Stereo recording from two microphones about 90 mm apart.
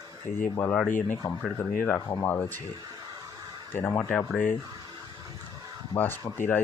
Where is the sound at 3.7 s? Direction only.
15° left (ahead or behind).